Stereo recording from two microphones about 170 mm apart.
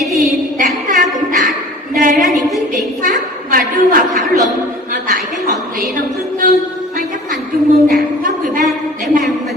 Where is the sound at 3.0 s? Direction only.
55° right (ahead or behind).